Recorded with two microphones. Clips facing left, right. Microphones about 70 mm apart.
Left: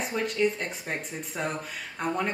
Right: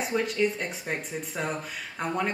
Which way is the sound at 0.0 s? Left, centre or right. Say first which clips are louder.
Even; centre.